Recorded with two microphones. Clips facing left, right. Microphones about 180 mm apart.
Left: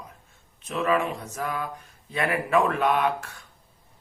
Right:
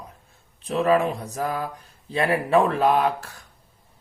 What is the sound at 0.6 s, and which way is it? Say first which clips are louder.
Speech: right 5 dB; 35° right (ahead or behind).